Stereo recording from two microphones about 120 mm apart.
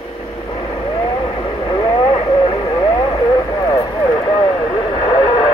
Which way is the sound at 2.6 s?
40° left (ahead or behind).